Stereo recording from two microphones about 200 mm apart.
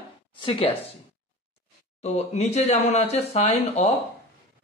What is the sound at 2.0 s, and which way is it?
Speech, 35° left (ahead or behind).